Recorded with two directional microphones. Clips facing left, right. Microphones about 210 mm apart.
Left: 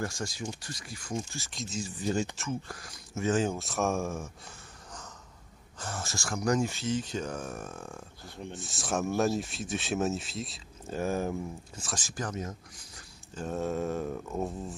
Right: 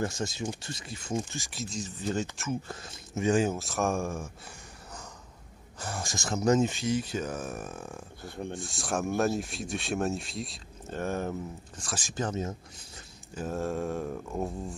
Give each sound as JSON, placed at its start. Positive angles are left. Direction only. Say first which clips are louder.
{"t": 0.0, "sound": "speech", "louder": "right 3 dB", "side_deg": -20}
{"t": 1.7, "sound": "speech", "louder": "left 2 dB", "side_deg": 10}
{"t": 2.7, "sound": "speech", "louder": "right 3 dB", "side_deg": -25}
{"t": 3.5, "sound": "speech", "louder": "right 1 dB", "side_deg": 0}
{"t": 5.8, "sound": "speech", "louder": "right 2 dB", "side_deg": -10}
{"t": 8.5, "sound": "speech", "louder": "left 2 dB", "side_deg": 5}
{"t": 12.1, "sound": "speech", "louder": "right 5 dB", "side_deg": -25}
{"t": 13.3, "sound": "speech", "louder": "even", "side_deg": -5}